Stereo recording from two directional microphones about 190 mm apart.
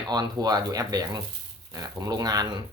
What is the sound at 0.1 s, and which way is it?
Speech, 20° right (ahead or behind).